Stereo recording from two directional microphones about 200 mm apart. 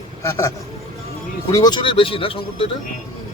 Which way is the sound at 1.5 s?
20° left (ahead or behind).